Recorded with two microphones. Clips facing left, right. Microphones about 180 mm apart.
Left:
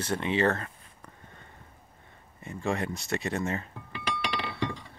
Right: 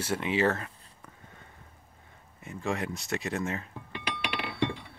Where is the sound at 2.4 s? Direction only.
Centre (ahead or behind).